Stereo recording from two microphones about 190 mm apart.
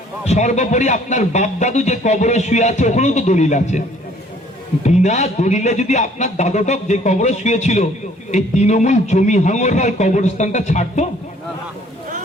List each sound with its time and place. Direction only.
0.3 s a man's voice: 35° left (ahead or behind)